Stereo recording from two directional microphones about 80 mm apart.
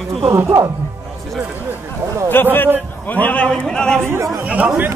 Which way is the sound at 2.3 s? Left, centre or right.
Left.